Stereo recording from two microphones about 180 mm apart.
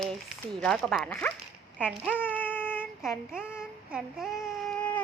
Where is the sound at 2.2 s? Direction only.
10° left (ahead or behind).